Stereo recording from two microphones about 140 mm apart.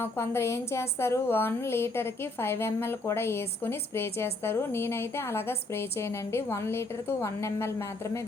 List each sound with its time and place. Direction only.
0.0 s a woman's voice: 20° left (ahead or behind)